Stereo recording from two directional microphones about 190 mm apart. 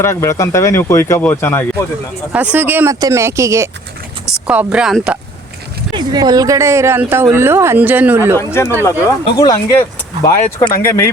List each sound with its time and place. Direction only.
0.0 s speech: 15° left (ahead or behind)
2.3 s speech: 10° right (ahead or behind)
4.4 s speech: 5° right (ahead or behind)
5.9 s speech: 20° right (ahead or behind)
8.4 s speech: 15° left (ahead or behind)